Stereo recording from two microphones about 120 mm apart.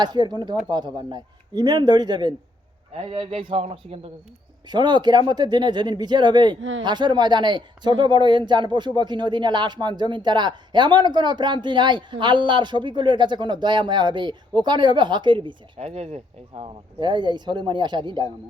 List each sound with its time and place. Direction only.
0.0 s a man's voice: 35° right (ahead or behind)
2.9 s a man's voice: 50° right (ahead or behind)
4.7 s a man's voice: 35° right (ahead or behind)
15.8 s speech: 55° right (ahead or behind)
17.0 s a man's voice: 40° right (ahead or behind)